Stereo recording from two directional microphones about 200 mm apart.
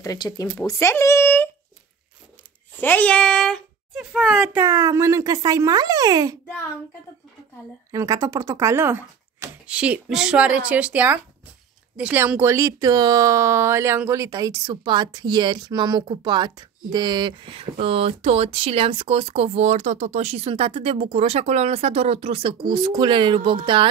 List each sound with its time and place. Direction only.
0.0 s speech: 15° left (ahead or behind)
2.8 s a child's voice: 10° left (ahead or behind); by 6.3 s 20° right (ahead or behind)
7.9 s a child's voice: 15° right (ahead or behind)